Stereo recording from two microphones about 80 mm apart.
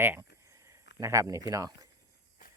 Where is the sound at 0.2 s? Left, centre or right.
Right.